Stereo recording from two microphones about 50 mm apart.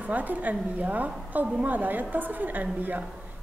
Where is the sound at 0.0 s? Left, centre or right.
Right.